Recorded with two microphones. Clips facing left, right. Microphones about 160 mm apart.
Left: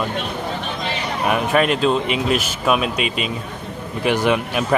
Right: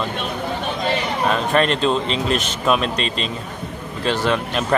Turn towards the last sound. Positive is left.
turn(degrees=15)  # may be behind; listen again after turning